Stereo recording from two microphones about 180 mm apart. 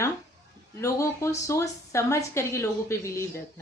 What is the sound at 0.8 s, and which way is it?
A woman's voice, 15° left (ahead or behind).